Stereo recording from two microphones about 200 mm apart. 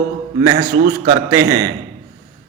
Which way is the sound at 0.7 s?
45° right (ahead or behind).